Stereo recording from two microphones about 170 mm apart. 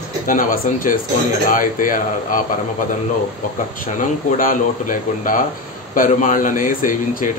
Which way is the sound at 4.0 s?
50° left (ahead or behind).